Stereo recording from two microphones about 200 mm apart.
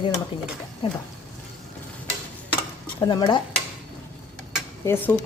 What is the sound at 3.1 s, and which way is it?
Speech, 25° left (ahead or behind).